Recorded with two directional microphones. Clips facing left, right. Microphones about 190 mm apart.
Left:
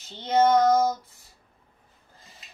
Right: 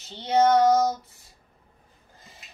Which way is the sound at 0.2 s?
15° right (ahead or behind).